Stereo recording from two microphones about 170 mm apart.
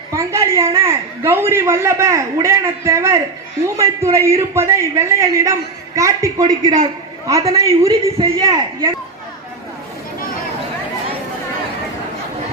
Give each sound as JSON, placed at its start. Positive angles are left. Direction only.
{"t": 0.1, "sound": "a woman's voice", "side_deg": -15}